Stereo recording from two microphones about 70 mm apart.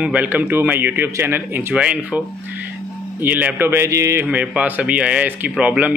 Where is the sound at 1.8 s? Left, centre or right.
Centre; by 4.3 s right.